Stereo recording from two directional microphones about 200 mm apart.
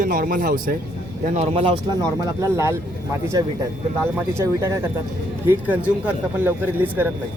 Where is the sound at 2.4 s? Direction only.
15° right (ahead or behind).